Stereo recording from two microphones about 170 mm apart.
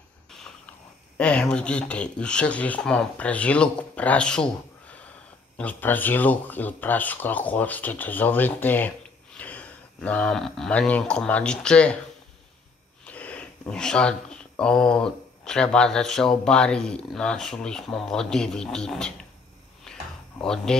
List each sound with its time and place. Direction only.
1.1 s speech: 5° left (ahead or behind)
13.0 s speech: 10° left (ahead or behind)
20.4 s speech: 5° left (ahead or behind)